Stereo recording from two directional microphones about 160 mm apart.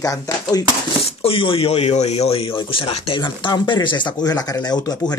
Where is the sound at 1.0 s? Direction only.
35° left (ahead or behind).